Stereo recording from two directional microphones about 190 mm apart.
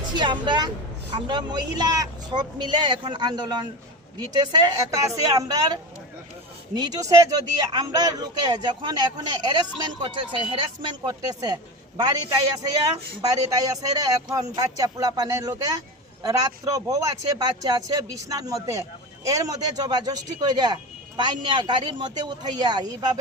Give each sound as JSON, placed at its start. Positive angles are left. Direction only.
{"t": 0.1, "sound": "speech", "side_deg": -25}
{"t": 6.8, "sound": "speech", "side_deg": -20}
{"t": 13.2, "sound": "speech", "side_deg": -20}